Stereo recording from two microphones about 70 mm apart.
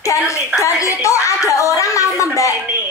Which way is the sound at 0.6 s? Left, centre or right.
Left.